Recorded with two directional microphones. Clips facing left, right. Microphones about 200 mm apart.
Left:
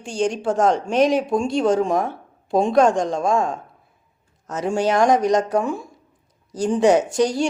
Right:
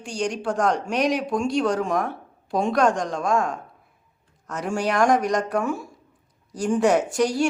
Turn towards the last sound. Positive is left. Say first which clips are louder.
# left 2 dB
turn(degrees=20)  # may be behind; listen again after turning